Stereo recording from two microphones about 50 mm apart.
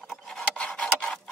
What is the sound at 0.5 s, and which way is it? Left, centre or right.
Filing, centre.